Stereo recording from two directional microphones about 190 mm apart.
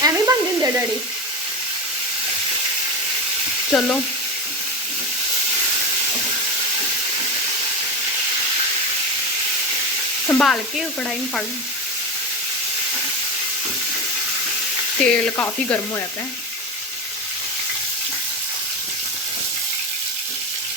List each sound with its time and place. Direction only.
0.0 s sizzle: 15° right (ahead or behind)
3.7 s speech: centre (ahead or behind)
10.2 s sizzle: 5° left (ahead or behind)
15.0 s speech: 10° left (ahead or behind)